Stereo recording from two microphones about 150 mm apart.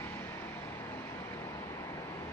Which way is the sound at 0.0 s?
15° left (ahead or behind).